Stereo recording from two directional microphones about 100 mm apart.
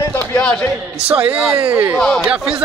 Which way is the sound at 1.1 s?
10° right (ahead or behind).